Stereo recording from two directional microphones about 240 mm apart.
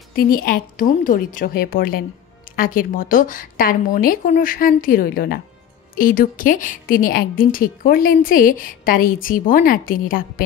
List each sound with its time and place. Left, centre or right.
0.1 s a woman's voice: left